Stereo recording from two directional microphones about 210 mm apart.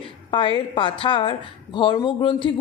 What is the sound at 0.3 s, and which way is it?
A woman's voice, 25° left (ahead or behind).